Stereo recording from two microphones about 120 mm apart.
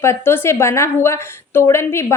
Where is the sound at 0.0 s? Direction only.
20° left (ahead or behind).